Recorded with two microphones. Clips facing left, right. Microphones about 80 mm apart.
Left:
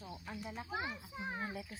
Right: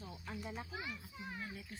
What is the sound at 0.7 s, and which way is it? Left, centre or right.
Speech, left.